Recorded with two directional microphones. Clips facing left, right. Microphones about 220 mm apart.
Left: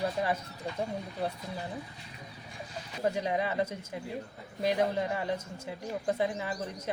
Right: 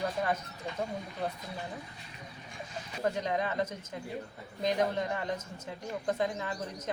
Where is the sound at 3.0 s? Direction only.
10° left (ahead or behind).